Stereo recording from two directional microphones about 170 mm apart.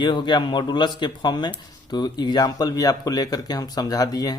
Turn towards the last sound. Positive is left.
turn(degrees=20)  # may be behind; listen again after turning